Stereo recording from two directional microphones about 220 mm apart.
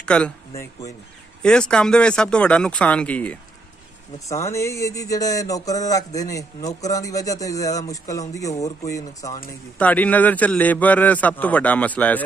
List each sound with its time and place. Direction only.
0.0 s speech: 5° left (ahead or behind)
1.4 s speech: 5° left (ahead or behind)
4.3 s a sound: 15° left (ahead or behind)